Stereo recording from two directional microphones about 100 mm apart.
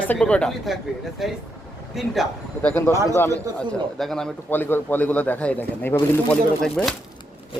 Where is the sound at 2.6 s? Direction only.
20° left (ahead or behind).